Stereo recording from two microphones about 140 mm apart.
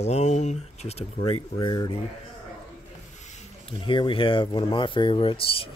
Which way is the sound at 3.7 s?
35° left (ahead or behind).